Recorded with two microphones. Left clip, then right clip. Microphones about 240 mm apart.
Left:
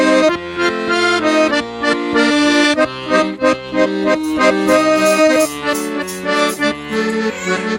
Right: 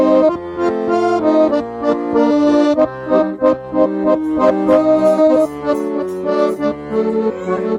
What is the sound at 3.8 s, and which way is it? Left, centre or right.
Music, left.